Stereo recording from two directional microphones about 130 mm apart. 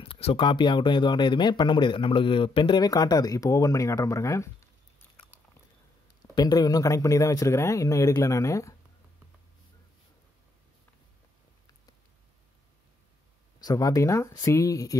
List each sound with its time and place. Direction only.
0.0 s speech: 45° left (ahead or behind); by 4.6 s 25° left (ahead or behind)
6.3 s speech: 30° left (ahead or behind)
13.6 s speech: 30° left (ahead or behind)